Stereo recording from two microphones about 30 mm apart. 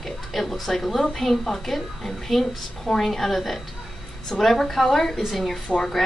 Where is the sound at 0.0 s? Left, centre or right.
Centre.